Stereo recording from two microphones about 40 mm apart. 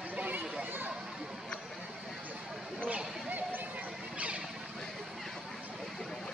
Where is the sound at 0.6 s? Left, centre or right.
Right.